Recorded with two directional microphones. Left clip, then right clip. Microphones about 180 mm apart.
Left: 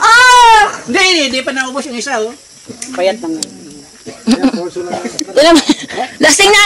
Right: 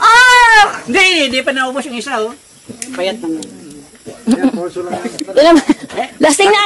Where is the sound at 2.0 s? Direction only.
15° right (ahead or behind).